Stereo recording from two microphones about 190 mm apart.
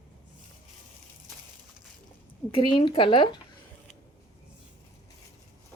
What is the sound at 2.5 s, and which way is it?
Speech, 25° left (ahead or behind).